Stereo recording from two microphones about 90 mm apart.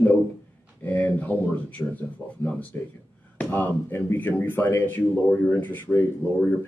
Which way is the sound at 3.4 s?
20° left (ahead or behind).